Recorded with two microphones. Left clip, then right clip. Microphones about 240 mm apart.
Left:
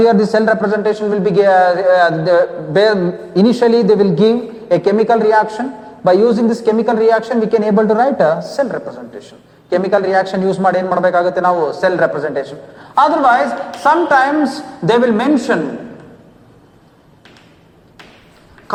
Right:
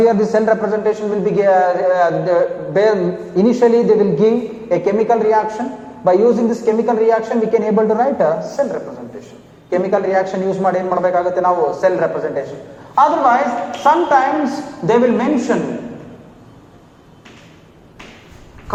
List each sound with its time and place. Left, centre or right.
0.0 s a man's voice: left